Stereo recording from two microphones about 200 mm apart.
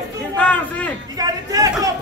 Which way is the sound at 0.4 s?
5° left (ahead or behind).